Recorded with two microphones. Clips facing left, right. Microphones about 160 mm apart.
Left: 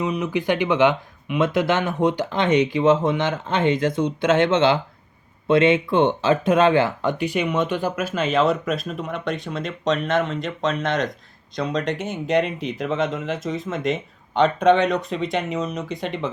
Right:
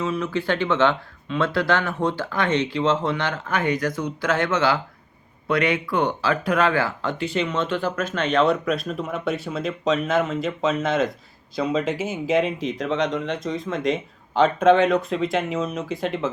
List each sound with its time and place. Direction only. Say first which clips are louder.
0.0 s speech: left 2 dB; 20° left (ahead or behind); by 16.3 s centre (ahead or behind)